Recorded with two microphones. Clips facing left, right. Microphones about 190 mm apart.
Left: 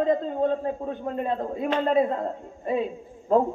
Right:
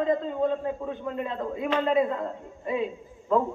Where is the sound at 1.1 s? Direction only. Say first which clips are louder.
Left 4 dB; 40° left (ahead or behind).